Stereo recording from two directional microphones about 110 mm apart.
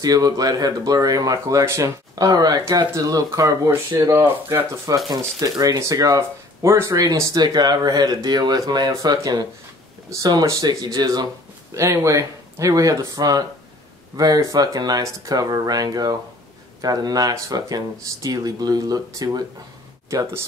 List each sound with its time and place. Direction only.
0.0 s speech: 35° right (ahead or behind)
5.1 s speech: 35° right (ahead or behind)
11.7 s speech: 25° right (ahead or behind)